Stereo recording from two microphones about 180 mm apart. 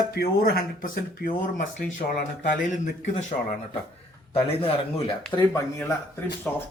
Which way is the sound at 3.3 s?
40° left (ahead or behind).